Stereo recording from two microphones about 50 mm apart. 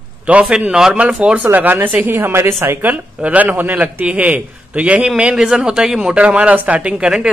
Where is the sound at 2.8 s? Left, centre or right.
Right; by 5.9 s centre.